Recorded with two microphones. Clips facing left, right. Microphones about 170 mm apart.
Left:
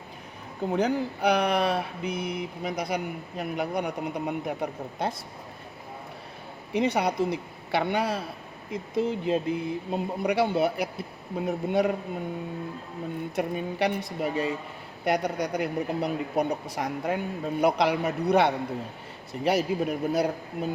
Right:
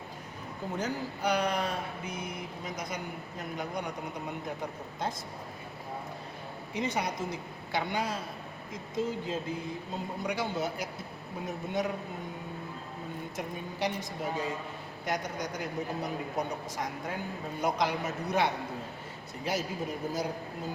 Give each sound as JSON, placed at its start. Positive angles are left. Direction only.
{"t": 0.7, "sound": "speech", "side_deg": 60}
{"t": 6.7, "sound": "speech", "side_deg": 65}
{"t": 13.3, "sound": "speech", "side_deg": 65}